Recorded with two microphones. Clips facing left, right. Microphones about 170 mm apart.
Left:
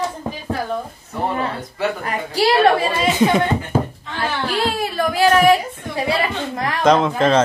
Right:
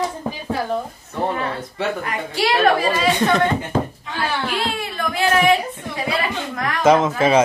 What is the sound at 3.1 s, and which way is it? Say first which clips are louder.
Speech: left 2 dB; 5° left (ahead or behind).